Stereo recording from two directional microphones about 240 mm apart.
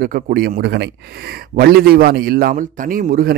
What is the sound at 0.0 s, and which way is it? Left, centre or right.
A man's voice, right.